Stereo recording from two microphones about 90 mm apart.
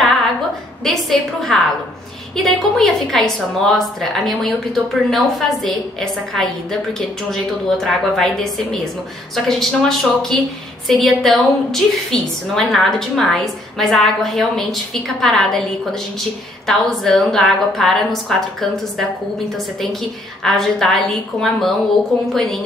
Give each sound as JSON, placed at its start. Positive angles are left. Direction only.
{"t": 0.8, "sound": "a woman's voice", "side_deg": 0}
{"t": 9.3, "sound": "a woman's voice", "side_deg": 5}